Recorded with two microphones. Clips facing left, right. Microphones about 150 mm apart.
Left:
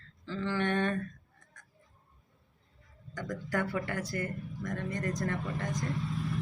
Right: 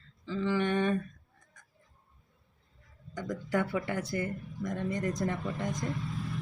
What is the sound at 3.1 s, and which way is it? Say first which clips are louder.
Speech: right 2 dB; 10° right (ahead or behind).